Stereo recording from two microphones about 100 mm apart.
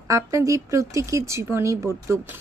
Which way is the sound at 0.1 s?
30° right (ahead or behind).